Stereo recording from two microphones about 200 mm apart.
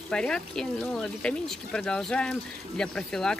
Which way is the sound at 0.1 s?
5° left (ahead or behind).